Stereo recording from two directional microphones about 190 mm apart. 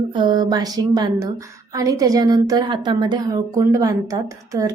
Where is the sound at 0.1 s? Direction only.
25° right (ahead or behind).